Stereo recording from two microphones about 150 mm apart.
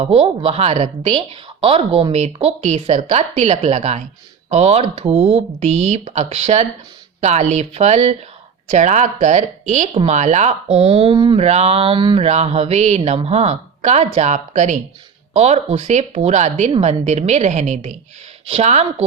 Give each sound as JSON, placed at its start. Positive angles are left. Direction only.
{"t": 0.0, "sound": "speech", "side_deg": -40}